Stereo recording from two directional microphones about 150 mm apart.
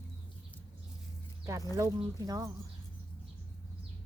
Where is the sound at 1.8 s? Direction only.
20° right (ahead or behind).